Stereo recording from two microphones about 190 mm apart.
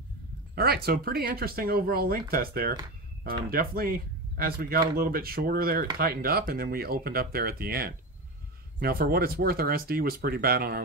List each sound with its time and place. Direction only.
0.6 s speech: 55° right (ahead or behind)